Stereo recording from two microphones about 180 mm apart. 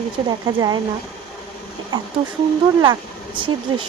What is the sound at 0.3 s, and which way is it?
Speech, 25° right (ahead or behind).